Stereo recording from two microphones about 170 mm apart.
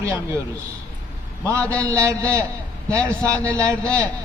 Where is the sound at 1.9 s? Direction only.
15° right (ahead or behind).